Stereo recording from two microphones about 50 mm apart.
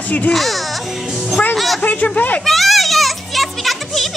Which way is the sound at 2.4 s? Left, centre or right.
Centre.